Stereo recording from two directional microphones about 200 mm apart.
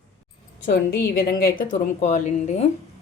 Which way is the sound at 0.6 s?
55° left (ahead or behind).